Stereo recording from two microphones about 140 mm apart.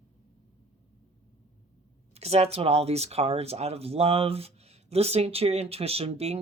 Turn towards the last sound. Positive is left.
turn(degrees=-45)  # may be behind; listen again after turning